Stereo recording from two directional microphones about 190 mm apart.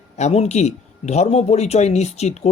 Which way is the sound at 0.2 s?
35° left (ahead or behind).